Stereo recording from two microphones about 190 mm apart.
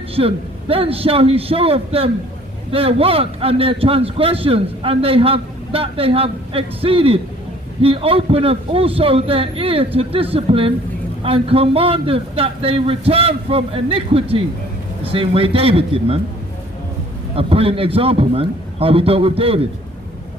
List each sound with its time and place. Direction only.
0.1 s a man's voice: 30° right (ahead or behind)
17.4 s a man's voice: 30° right (ahead or behind)